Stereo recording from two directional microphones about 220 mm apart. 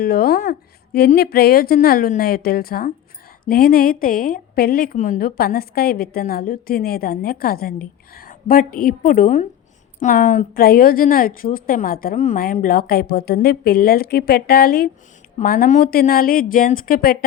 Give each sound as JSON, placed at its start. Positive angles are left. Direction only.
{"t": 0.0, "sound": "a woman's voice", "side_deg": 45}